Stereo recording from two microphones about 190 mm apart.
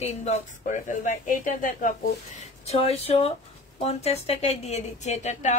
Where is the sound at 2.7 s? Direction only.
35° left (ahead or behind).